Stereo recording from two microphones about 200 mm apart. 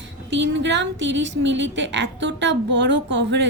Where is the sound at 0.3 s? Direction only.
60° right (ahead or behind).